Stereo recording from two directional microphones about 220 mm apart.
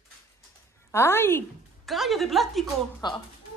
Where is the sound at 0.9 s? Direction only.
10° left (ahead or behind).